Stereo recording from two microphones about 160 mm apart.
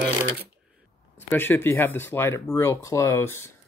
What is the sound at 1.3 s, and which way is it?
Speech, 15° left (ahead or behind).